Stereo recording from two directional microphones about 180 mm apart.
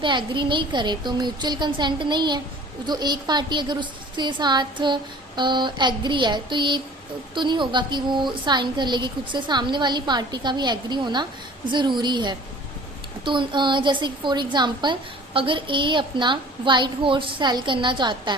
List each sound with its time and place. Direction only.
0.0 s a woman's voice: 25° right (ahead or behind)